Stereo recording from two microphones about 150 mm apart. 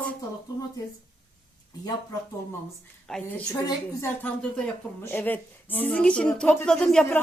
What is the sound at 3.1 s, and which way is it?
Speech, 5° left (ahead or behind).